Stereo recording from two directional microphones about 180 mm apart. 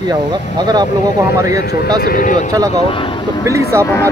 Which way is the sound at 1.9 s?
55° left (ahead or behind).